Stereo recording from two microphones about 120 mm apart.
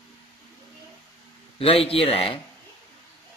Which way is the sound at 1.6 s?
50° left (ahead or behind).